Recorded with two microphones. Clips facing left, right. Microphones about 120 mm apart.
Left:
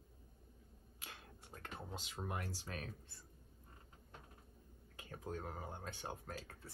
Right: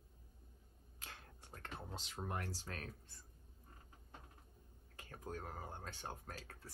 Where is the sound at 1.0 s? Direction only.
10° left (ahead or behind).